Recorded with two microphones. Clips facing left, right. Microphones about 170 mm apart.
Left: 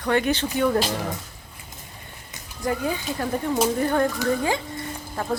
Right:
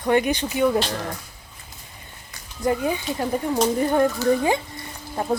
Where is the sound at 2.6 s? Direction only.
20° right (ahead or behind).